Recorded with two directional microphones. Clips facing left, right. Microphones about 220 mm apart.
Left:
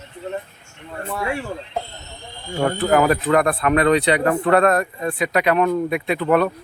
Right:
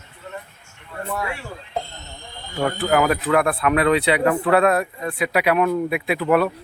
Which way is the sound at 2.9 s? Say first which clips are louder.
Left 2 dB; centre (ahead or behind).